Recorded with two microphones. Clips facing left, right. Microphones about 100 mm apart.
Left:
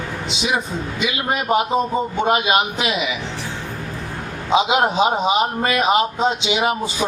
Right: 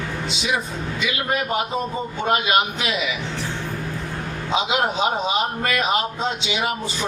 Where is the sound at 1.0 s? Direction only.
20° left (ahead or behind).